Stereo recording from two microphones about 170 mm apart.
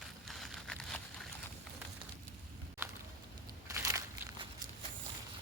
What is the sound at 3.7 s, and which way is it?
Crushing, 15° right (ahead or behind).